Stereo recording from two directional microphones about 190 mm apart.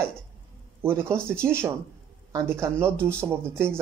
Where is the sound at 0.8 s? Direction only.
15° right (ahead or behind).